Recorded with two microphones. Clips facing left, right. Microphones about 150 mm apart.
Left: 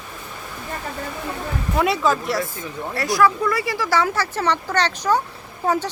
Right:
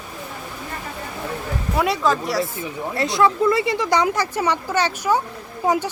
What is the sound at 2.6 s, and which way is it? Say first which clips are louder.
Speech: right 2 dB; 20° right (ahead or behind).